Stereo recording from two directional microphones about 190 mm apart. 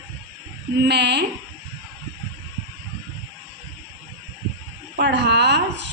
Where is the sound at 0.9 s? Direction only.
65° right (ahead or behind).